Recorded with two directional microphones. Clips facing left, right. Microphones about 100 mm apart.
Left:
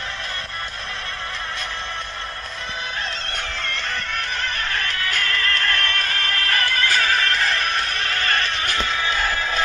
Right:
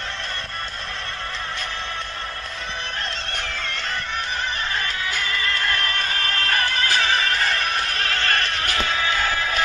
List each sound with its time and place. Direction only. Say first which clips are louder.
4.4 s music: even; 15° right (ahead or behind)
7.1 s music: left 1 dB; 5° right (ahead or behind)